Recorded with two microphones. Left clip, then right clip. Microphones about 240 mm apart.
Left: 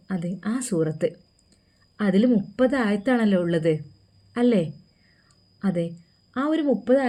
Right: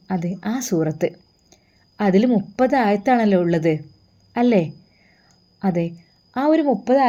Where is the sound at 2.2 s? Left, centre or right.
Centre.